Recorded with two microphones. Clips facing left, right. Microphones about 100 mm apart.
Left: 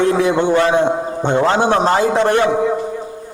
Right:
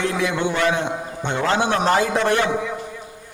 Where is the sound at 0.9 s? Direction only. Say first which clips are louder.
Left 9 dB; 20° left (ahead or behind).